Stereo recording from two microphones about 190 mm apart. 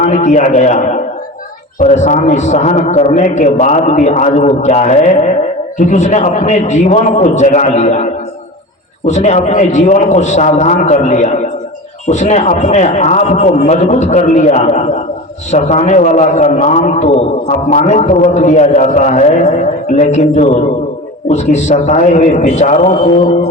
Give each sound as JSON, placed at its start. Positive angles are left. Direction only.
{"t": 0.0, "sound": "a man's voice", "side_deg": 40}